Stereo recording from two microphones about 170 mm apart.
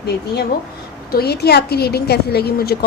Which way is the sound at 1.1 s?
70° left (ahead or behind).